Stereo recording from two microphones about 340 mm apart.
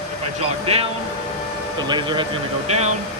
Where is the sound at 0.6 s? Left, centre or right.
Centre.